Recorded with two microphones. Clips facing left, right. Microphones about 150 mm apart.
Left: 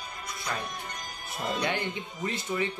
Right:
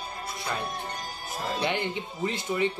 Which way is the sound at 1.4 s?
25° right (ahead or behind).